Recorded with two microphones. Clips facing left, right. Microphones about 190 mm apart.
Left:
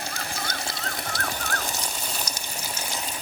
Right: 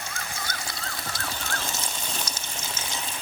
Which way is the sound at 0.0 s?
35° left (ahead or behind).